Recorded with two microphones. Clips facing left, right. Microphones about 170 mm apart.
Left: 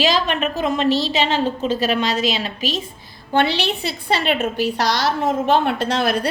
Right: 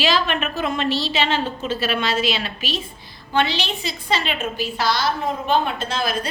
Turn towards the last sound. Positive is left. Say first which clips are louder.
# left 5 dB
turn(degrees=70)  # may be behind; listen again after turning